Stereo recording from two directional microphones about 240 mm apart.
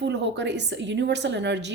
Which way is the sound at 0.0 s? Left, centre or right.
Right.